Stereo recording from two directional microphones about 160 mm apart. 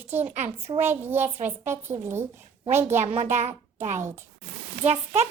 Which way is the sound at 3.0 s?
50° right (ahead or behind).